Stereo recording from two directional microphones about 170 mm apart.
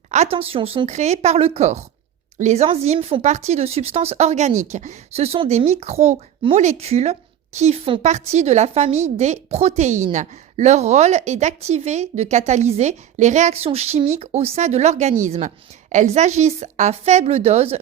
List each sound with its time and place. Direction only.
0.1 s a woman's voice: 40° right (ahead or behind)